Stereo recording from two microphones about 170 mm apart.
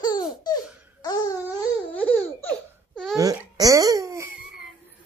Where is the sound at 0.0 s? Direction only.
25° left (ahead or behind).